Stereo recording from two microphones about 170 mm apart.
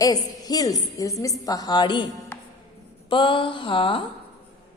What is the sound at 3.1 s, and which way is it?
Speech, 30° left (ahead or behind).